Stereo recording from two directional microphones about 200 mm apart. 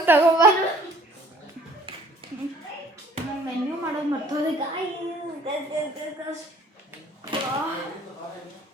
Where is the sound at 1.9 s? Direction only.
25° right (ahead or behind).